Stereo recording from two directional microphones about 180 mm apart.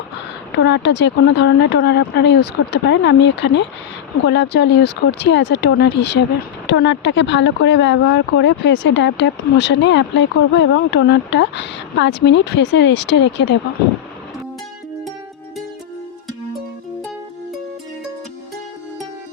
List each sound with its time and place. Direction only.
0.5 s speech: 75° left (ahead or behind)